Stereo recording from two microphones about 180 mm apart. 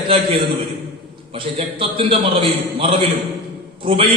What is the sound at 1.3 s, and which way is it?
A man's voice, 30° right (ahead or behind).